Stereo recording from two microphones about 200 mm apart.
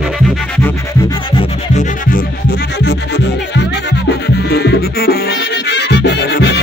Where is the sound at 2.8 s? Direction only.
55° left (ahead or behind).